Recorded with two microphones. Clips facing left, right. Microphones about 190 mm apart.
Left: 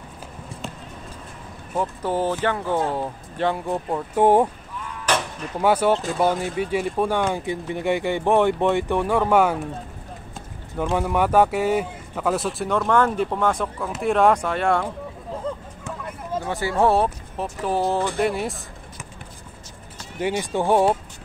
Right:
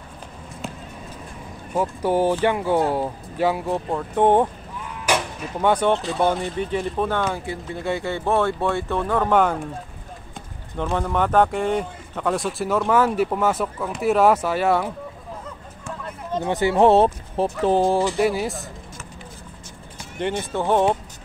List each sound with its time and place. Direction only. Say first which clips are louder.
1.7 s speech: right 3 dB; 10° right (ahead or behind); by 4.5 s 10° left (ahead or behind)
5.0 s sheep: right 1 dB; 10° right (ahead or behind)
5.6 s speech: even; 5° left (ahead or behind)
10.8 s speech: left 1 dB; 10° left (ahead or behind)
15.5 s a sound: left 10 dB; 30° left (ahead or behind)
16.4 s speech: right 4 dB; 20° right (ahead or behind)
18.2 s speech: right 2 dB; centre (ahead or behind)
20.2 s speech: left 1 dB; 10° left (ahead or behind)